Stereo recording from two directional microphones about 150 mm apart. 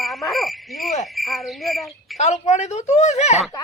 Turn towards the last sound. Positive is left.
turn(degrees=50)  # may be behind; listen again after turning